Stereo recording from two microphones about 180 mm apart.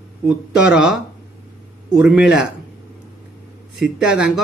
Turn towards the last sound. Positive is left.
turn(degrees=-5)  # may be behind; listen again after turning